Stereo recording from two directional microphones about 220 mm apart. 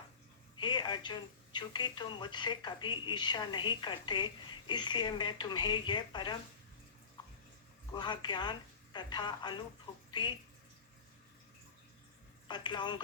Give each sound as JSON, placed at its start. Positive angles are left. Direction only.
{"t": 0.6, "sound": "speech", "side_deg": 20}
{"t": 7.9, "sound": "speech", "side_deg": 20}
{"t": 12.5, "sound": "speech", "side_deg": 20}